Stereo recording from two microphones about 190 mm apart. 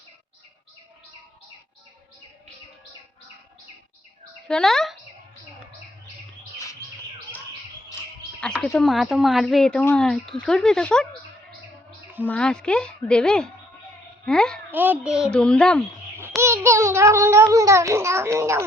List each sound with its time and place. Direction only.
4.4 s speech: 5° left (ahead or behind)
8.6 s speech: centre (ahead or behind)
12.2 s speech: 5° left (ahead or behind)
14.7 s speech: 10° right (ahead or behind)
16.4 s a sound: 15° right (ahead or behind)